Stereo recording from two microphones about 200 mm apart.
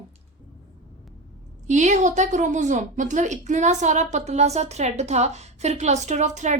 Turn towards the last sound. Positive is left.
turn(degrees=-35)  # may be behind; listen again after turning